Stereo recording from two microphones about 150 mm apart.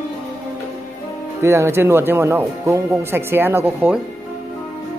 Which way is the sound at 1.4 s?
20° right (ahead or behind).